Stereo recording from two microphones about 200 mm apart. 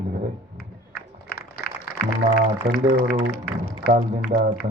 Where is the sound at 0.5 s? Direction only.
50° left (ahead or behind).